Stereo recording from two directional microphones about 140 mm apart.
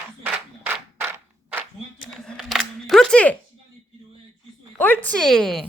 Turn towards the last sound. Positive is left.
turn(degrees=5)  # may be behind; listen again after turning